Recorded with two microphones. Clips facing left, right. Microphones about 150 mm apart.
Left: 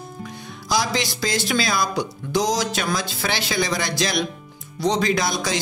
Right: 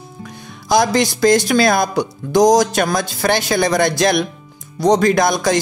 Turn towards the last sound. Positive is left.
turn(degrees=-50)  # may be behind; listen again after turning